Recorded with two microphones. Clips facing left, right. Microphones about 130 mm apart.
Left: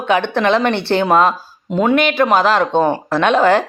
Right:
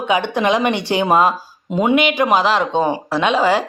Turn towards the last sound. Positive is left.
turn(degrees=-10)  # may be behind; listen again after turning